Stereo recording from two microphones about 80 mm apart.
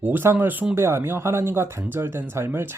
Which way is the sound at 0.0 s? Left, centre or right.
Right.